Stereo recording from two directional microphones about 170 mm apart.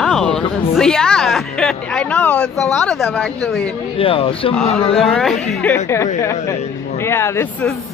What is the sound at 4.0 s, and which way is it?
Speech, 30° left (ahead or behind).